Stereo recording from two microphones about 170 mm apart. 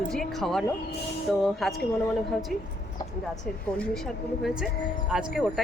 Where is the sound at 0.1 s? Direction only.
Centre (ahead or behind).